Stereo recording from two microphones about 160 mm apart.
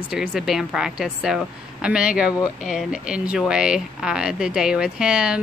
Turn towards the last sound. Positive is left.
turn(degrees=-5)  # may be behind; listen again after turning